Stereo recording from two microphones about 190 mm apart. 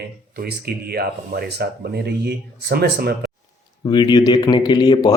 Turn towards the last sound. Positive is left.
turn(degrees=20)  # may be behind; listen again after turning